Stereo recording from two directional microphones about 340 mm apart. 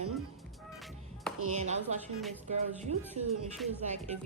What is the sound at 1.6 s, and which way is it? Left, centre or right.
A woman's voice, centre.